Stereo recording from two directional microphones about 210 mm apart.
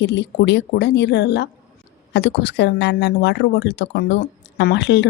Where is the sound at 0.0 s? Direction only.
55° left (ahead or behind).